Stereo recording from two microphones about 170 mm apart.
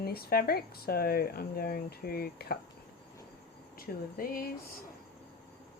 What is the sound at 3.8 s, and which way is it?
Speech, 60° left (ahead or behind).